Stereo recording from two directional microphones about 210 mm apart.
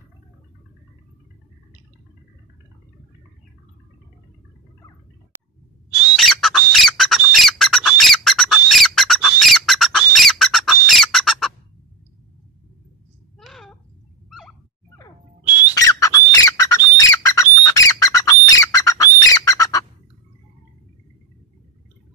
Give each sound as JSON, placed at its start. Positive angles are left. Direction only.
{"t": 5.9, "sound": "squawk", "side_deg": -5}
{"t": 13.4, "sound": "a sound", "side_deg": 0}
{"t": 15.4, "sound": "bird", "side_deg": -10}
{"t": 15.7, "sound": "squawk", "side_deg": 15}